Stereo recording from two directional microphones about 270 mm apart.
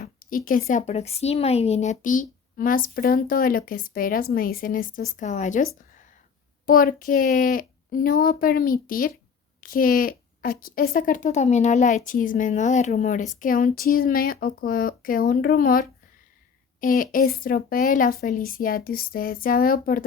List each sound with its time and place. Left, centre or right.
0.0 s a sound: left
0.7 s speech: left
6.7 s speech: left